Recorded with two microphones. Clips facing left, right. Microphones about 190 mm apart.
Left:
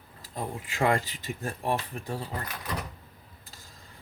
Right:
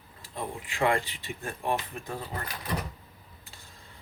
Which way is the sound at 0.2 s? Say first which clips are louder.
Left 1 dB; 40° left (ahead or behind).